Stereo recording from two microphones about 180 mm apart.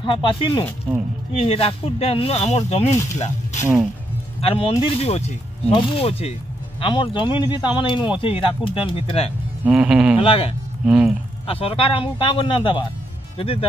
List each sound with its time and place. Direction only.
0.0 s speech: 25° left (ahead or behind)
9.7 s speech: 5° right (ahead or behind)
10.1 s speech: 30° left (ahead or behind)
10.9 s speech: 5° right (ahead or behind)
11.4 s speech: 30° left (ahead or behind)